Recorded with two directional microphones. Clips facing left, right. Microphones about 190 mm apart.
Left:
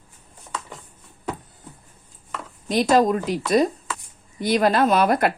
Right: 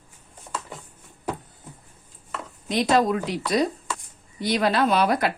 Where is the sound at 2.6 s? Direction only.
45° left (ahead or behind).